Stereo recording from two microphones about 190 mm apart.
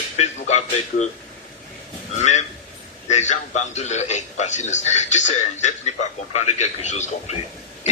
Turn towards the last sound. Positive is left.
turn(degrees=40)  # may be behind; listen again after turning